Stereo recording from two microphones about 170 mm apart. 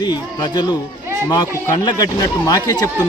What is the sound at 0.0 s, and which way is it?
A man's voice, 25° left (ahead or behind).